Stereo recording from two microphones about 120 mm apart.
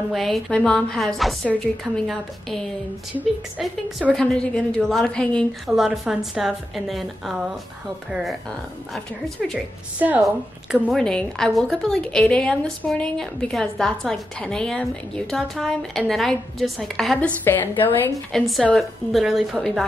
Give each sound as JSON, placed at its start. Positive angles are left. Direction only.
{"t": 0.1, "sound": "a woman's voice", "side_deg": 0}
{"t": 4.1, "sound": "a woman's voice", "side_deg": 5}
{"t": 5.7, "sound": "a woman's voice", "side_deg": -5}
{"t": 10.7, "sound": "a woman's voice", "side_deg": 0}
{"t": 18.3, "sound": "a woman's voice", "side_deg": 0}